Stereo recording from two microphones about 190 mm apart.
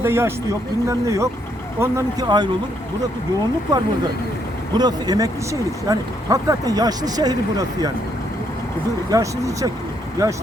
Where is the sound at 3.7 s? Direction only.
20° right (ahead or behind).